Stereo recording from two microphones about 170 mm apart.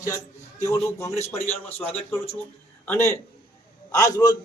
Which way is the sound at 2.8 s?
15° left (ahead or behind).